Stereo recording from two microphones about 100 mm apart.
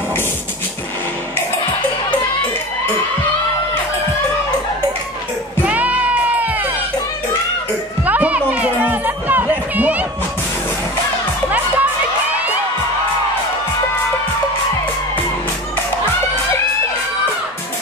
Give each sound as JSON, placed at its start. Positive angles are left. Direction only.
{"t": 5.7, "sound": "music", "side_deg": -15}
{"t": 8.0, "sound": "music", "side_deg": -15}
{"t": 11.4, "sound": "music", "side_deg": -15}